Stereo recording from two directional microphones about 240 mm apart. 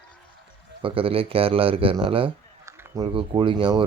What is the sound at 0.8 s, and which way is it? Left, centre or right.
Speech, right.